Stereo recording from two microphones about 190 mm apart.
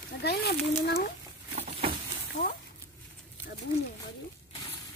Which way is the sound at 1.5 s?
30° right (ahead or behind).